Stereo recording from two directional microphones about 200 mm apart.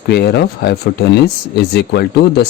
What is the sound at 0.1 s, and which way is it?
Speech, 55° left (ahead or behind).